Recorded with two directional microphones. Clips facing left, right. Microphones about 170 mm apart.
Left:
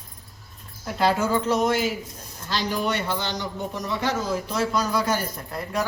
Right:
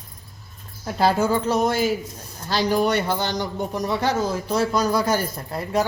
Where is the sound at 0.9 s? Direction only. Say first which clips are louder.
Right 2 dB; 35° right (ahead or behind).